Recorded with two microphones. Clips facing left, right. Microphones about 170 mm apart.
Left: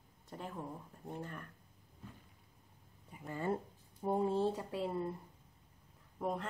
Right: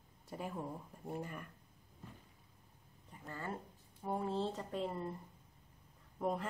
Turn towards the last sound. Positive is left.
turn(degrees=0)  # may be behind; listen again after turning